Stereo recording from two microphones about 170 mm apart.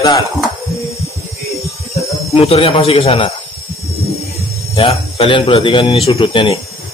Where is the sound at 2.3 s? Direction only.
35° left (ahead or behind).